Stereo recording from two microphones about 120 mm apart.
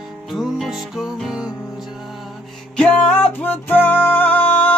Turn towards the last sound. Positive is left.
turn(degrees=15)  # may be behind; listen again after turning